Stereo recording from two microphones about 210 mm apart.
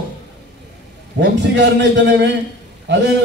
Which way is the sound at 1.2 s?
55° right (ahead or behind).